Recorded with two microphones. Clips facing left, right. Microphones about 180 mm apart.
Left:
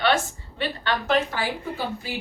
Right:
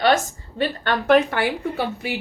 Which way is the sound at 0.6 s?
55° right (ahead or behind).